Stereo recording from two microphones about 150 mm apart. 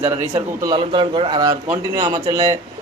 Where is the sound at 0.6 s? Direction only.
30° right (ahead or behind).